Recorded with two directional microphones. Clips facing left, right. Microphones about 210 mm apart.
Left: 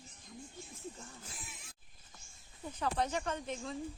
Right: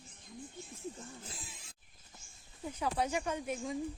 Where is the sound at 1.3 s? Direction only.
30° right (ahead or behind).